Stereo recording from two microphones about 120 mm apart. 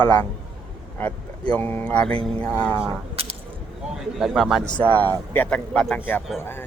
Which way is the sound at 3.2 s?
55° right (ahead or behind).